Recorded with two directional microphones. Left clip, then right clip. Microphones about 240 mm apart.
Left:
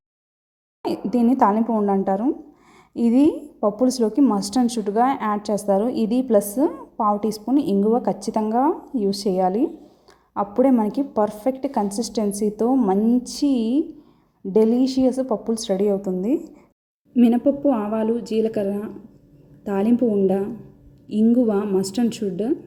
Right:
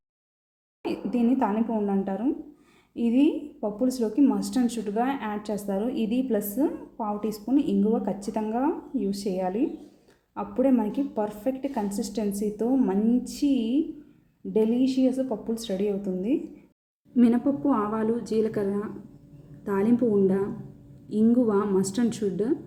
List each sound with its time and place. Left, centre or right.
0.8 s a woman's voice: left